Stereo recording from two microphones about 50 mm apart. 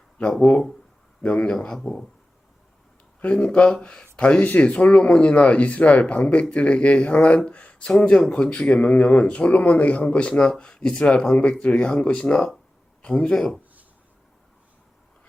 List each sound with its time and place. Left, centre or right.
0.2 s speech: left
1.5 s a man's voice: centre
3.2 s a man's voice: left